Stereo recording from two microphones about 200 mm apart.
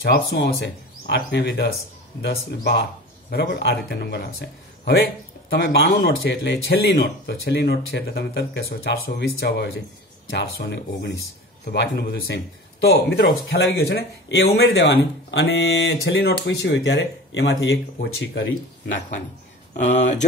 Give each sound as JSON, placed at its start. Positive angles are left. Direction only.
{"t": 0.0, "sound": "speech", "side_deg": 55}
{"t": 19.8, "sound": "speech", "side_deg": 35}